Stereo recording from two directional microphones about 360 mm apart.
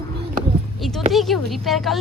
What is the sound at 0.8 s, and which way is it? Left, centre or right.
Speech, centre.